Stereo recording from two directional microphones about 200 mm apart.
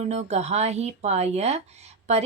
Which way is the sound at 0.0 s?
35° right (ahead or behind).